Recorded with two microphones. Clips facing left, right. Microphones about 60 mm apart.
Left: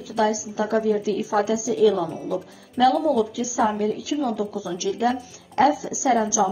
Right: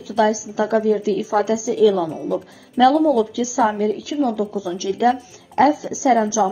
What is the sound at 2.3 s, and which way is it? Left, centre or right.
Speech, right.